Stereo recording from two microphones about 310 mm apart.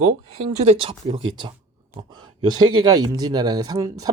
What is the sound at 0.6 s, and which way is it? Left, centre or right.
Speech, centre.